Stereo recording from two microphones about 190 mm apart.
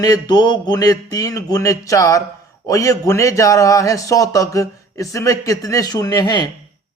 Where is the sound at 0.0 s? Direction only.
20° left (ahead or behind).